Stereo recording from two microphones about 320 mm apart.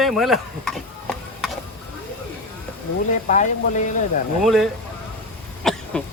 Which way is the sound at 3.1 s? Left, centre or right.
Left.